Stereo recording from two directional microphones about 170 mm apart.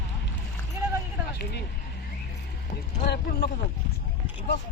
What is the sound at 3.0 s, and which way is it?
Speech, 75° left (ahead or behind).